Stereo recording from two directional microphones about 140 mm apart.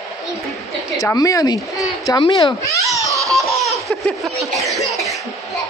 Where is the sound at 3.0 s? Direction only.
25° right (ahead or behind).